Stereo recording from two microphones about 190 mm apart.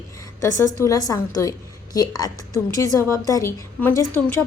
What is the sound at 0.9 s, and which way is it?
A woman's voice, 20° left (ahead or behind).